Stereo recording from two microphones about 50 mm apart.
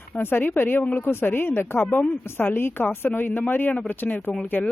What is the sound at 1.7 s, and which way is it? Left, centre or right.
Speech, left.